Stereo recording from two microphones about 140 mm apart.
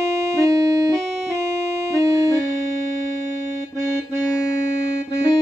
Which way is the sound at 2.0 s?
20° right (ahead or behind).